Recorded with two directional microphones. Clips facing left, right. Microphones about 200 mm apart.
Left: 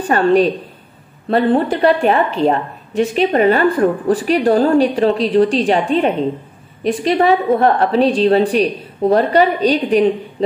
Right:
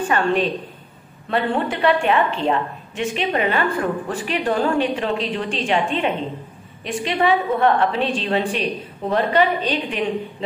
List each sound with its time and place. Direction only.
0.1 s a woman's voice: 40° left (ahead or behind)